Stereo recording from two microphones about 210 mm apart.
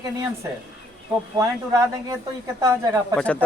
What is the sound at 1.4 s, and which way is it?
Speech, 15° right (ahead or behind).